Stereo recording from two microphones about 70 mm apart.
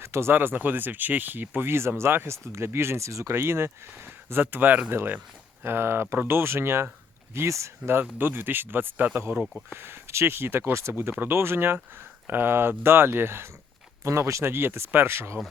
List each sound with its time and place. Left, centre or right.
0.0 s speech: right
8.2 s speech: right
9.5 s speech: centre
9.7 s speech: right